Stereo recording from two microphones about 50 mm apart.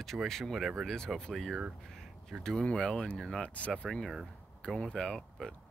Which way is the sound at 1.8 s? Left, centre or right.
Centre.